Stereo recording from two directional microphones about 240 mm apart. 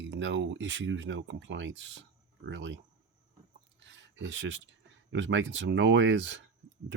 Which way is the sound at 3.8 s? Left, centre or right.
Right.